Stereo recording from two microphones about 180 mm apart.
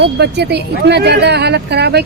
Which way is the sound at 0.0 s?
65° right (ahead or behind).